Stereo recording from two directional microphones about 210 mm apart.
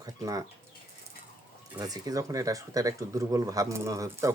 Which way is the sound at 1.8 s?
15° right (ahead or behind).